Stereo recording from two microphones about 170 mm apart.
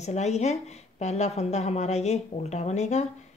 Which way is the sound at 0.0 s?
40° left (ahead or behind).